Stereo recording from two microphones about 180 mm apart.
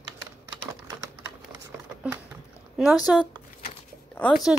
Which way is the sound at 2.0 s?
5° right (ahead or behind).